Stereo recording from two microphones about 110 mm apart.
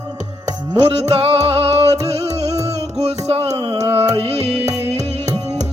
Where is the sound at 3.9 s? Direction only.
65° right (ahead or behind).